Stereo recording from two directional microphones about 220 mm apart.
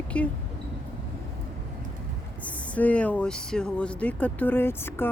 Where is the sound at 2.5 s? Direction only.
5° left (ahead or behind).